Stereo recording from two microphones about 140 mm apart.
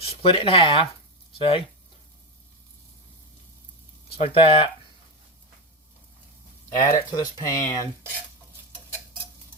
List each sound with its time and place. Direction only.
0.2 s speech: 40° left (ahead or behind)
4.2 s speech: 40° left (ahead or behind)
6.7 s speech: 25° left (ahead or behind)